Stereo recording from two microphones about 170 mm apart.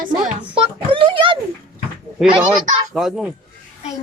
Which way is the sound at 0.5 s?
30° right (ahead or behind).